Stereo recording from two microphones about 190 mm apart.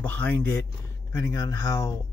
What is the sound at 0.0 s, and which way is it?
Speech, 10° left (ahead or behind).